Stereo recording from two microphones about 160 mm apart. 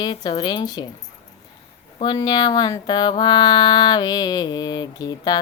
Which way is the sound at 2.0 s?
25° left (ahead or behind).